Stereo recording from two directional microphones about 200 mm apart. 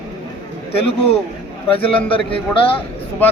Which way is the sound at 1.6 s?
25° left (ahead or behind).